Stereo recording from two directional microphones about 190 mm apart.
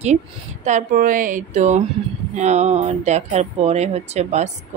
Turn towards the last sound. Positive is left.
turn(degrees=-35)  # may be behind; listen again after turning